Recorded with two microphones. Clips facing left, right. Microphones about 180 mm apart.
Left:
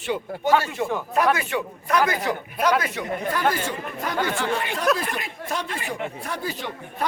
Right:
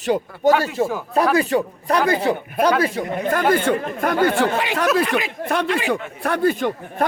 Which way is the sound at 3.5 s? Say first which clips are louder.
Right 10 dB; 60° right (ahead or behind).